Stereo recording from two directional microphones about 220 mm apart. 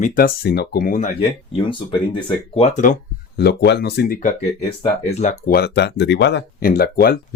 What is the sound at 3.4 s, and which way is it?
Speech, 50° left (ahead or behind).